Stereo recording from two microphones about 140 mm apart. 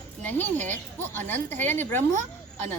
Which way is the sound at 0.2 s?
15° left (ahead or behind).